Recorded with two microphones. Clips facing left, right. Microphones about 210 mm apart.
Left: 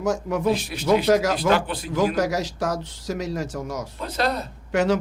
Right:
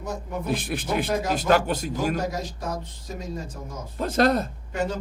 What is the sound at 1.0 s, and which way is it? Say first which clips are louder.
Speech: left 8 dB; 90° left.